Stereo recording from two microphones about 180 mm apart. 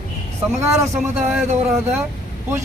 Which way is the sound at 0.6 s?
15° right (ahead or behind).